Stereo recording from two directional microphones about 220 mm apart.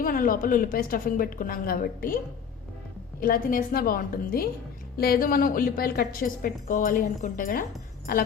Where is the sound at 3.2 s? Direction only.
40° left (ahead or behind).